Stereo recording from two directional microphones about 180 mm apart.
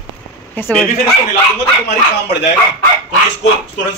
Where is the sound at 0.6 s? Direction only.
10° left (ahead or behind).